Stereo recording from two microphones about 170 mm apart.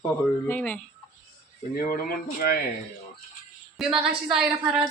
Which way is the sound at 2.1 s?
60° left (ahead or behind).